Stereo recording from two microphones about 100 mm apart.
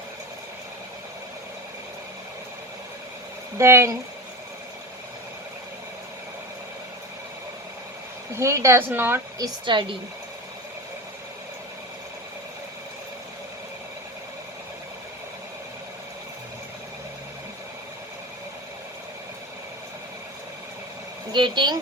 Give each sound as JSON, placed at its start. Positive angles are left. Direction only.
{"t": 3.6, "sound": "a woman's voice", "side_deg": -25}
{"t": 8.4, "sound": "a woman's voice", "side_deg": -30}
{"t": 9.6, "sound": "a woman's voice", "side_deg": -55}
{"t": 21.3, "sound": "speech", "side_deg": -50}